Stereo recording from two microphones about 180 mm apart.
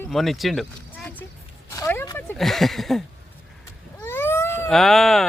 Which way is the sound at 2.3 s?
Centre (ahead or behind).